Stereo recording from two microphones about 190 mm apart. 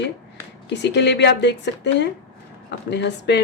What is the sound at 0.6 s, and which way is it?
Speech, 65° left (ahead or behind).